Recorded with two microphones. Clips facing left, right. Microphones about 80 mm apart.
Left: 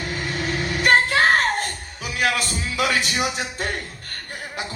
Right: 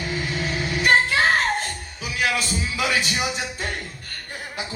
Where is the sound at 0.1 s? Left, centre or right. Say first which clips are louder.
Even; left.